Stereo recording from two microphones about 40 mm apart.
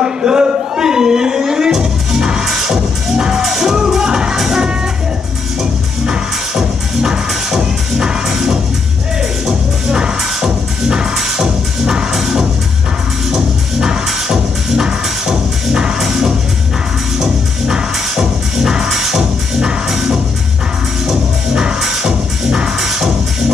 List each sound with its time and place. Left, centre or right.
0.0 s music: centre